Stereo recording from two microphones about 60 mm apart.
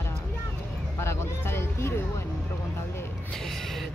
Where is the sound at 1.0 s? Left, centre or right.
Left.